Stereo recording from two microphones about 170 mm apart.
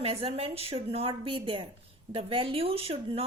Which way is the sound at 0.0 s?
35° right (ahead or behind).